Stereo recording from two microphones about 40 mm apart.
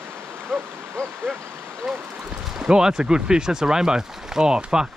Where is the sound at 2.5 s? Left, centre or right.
Centre.